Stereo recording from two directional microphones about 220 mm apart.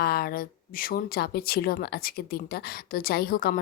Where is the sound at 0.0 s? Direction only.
45° left (ahead or behind).